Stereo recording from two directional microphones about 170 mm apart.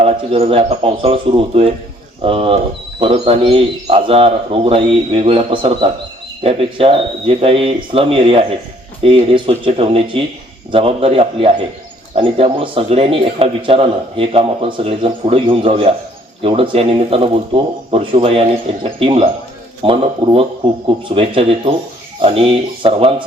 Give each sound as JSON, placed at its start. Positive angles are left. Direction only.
{"t": 0.0, "sound": "a man's voice", "side_deg": -35}